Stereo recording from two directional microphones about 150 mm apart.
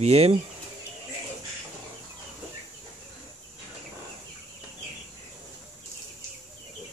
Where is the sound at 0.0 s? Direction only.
45° right (ahead or behind).